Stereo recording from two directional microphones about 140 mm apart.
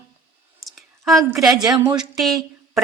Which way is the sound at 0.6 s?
Centre (ahead or behind).